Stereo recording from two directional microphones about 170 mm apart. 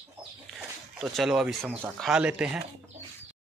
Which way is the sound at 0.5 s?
Centre (ahead or behind).